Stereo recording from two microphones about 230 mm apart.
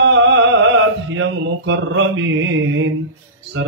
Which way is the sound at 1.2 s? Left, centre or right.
Right.